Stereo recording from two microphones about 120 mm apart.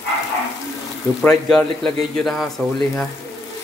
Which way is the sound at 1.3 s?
5° left (ahead or behind).